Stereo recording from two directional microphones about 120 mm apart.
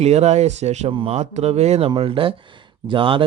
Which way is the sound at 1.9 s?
45° right (ahead or behind).